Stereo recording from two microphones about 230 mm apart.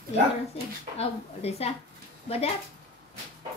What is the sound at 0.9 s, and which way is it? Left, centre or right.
A woman's voice, left.